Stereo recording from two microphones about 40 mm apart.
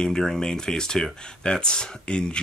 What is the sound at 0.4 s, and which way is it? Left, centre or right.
Speech, centre.